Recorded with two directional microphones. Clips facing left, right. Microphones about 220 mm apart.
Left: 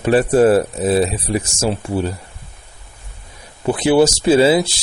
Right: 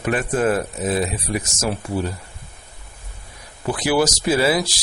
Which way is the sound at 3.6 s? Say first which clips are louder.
Left 6 dB; 25° left (ahead or behind).